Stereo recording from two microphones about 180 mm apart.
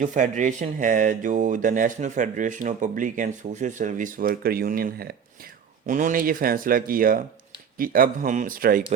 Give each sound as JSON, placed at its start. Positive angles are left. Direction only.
{"t": 0.0, "sound": "speech", "side_deg": -45}
{"t": 5.8, "sound": "speech", "side_deg": -45}